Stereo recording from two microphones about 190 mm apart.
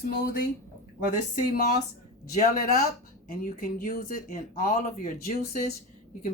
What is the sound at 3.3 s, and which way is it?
Speech, 50° left (ahead or behind).